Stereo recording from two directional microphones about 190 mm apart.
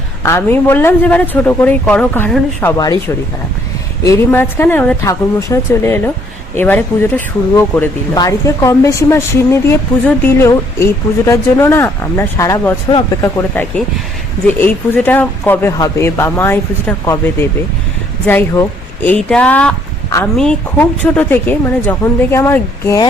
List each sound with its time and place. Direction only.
0.2 s speech: 10° left (ahead or behind)
4.0 s speech: 15° left (ahead or behind)